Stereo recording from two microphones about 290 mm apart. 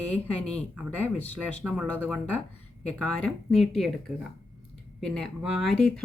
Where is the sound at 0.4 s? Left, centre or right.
Centre.